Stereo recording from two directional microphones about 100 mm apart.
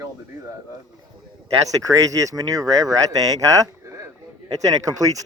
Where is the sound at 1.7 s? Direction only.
35° right (ahead or behind).